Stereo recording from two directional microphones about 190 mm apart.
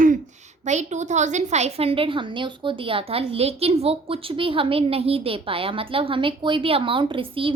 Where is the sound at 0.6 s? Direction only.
40° right (ahead or behind).